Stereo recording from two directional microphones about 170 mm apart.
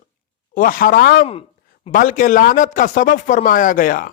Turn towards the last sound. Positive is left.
turn(degrees=55)  # may be behind; listen again after turning